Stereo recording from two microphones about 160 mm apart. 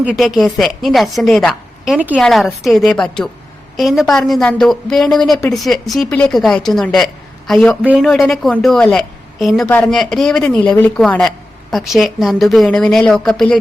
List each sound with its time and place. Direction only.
0.0 s a woman's voice: 5° right (ahead or behind)
7.8 s speech: 10° right (ahead or behind)
8.0 s a woman's voice: 5° left (ahead or behind)